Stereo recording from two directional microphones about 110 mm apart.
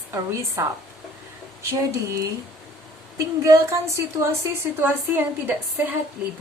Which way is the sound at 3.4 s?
25° right (ahead or behind).